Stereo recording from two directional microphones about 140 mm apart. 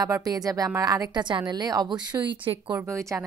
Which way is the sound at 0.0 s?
25° right (ahead or behind).